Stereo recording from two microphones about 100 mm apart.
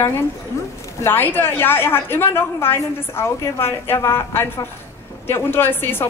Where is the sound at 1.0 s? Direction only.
20° left (ahead or behind).